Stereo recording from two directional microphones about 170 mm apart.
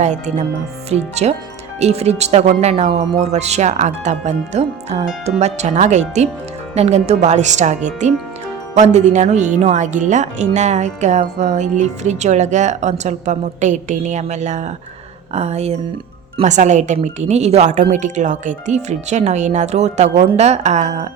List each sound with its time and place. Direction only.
0.0 s speech: 45° right (ahead or behind)